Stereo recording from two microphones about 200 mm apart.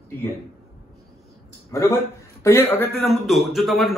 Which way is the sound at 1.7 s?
15° left (ahead or behind).